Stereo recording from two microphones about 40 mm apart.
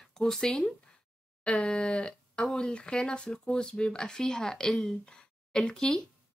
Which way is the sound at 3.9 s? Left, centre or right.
Centre.